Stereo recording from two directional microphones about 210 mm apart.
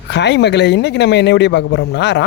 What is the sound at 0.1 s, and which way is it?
Speech, 55° left (ahead or behind).